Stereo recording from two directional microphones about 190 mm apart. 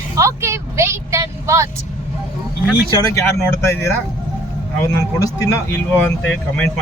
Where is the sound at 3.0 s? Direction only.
15° left (ahead or behind).